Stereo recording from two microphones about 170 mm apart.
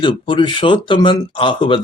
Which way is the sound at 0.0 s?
30° left (ahead or behind).